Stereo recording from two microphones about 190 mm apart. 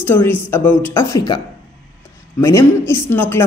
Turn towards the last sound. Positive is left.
turn(degrees=10)  # may be behind; listen again after turning